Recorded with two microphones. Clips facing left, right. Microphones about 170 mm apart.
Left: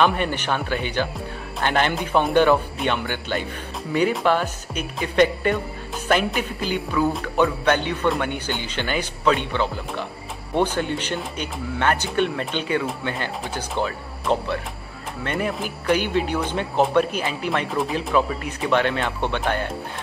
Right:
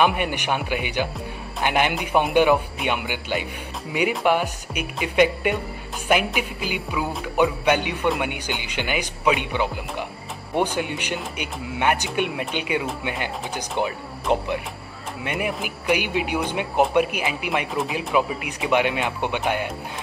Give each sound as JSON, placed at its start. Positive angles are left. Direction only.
{"t": 0.0, "sound": "speech", "side_deg": -15}